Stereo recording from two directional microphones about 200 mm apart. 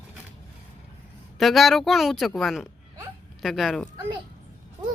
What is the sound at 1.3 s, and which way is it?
A woman's voice, centre (ahead or behind).